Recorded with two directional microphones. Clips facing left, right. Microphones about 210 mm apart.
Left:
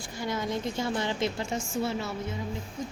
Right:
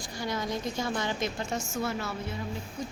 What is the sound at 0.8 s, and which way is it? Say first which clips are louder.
A woman's voice: left 2 dB; 25° left (ahead or behind).